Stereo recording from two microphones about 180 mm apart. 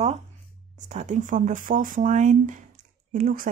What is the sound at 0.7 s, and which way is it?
Speech, 40° right (ahead or behind).